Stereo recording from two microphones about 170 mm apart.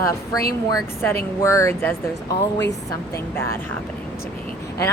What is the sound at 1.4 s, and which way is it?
Speech, 20° left (ahead or behind).